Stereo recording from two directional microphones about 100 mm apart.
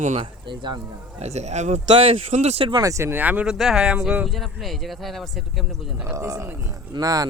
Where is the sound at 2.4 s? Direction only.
80° right.